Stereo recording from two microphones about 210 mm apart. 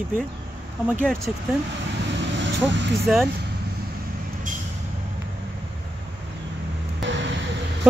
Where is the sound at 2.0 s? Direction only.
60° right (ahead or behind).